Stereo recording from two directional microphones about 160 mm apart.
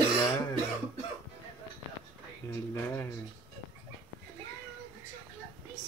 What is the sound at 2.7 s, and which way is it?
Speech, 15° left (ahead or behind).